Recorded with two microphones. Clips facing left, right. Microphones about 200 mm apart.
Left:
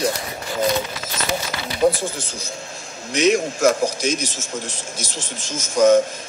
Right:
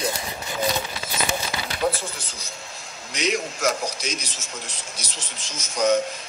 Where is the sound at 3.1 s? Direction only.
50° left (ahead or behind).